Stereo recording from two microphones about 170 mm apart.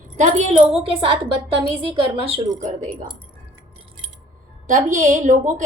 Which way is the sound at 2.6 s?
50° right (ahead or behind).